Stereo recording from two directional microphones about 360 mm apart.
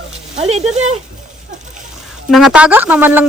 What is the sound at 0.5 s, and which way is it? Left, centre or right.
Speech, centre.